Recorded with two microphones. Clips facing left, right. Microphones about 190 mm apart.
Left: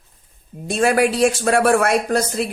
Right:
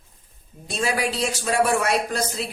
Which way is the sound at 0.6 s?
55° left (ahead or behind).